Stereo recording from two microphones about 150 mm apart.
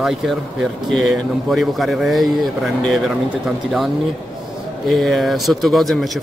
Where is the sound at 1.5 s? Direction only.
Centre (ahead or behind).